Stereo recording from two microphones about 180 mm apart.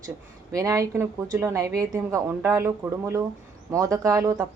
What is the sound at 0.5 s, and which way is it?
A woman's voice, 20° right (ahead or behind).